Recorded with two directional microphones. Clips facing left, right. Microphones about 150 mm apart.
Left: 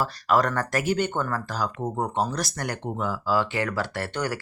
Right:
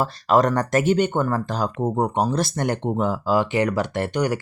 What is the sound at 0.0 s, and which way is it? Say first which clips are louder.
Speech: right 4 dB; 25° right (ahead or behind).